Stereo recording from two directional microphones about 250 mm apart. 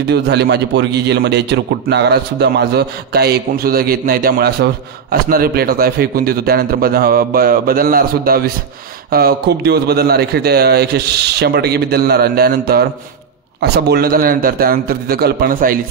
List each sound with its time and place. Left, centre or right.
0.1 s a man's voice: right